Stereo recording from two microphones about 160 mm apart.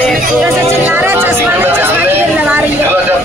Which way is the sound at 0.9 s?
10° right (ahead or behind).